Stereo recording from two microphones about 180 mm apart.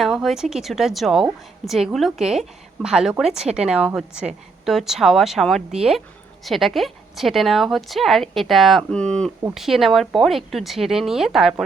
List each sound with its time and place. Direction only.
0.0 s a woman's voice: centre (ahead or behind)